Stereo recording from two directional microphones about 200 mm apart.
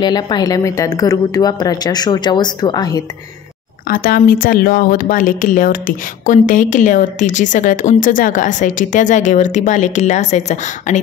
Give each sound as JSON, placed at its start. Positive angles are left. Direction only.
{"t": 0.0, "sound": "speech", "side_deg": 20}
{"t": 3.8, "sound": "speech", "side_deg": 45}